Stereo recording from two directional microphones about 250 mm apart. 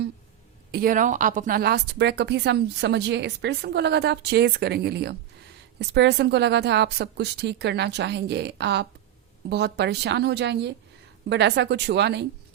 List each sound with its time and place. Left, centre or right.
0.7 s a woman's voice: right